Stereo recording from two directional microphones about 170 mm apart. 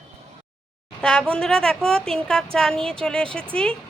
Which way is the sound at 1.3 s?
5° left (ahead or behind).